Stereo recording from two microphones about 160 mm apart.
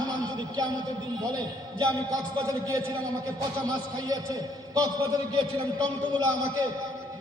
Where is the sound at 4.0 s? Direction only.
25° right (ahead or behind).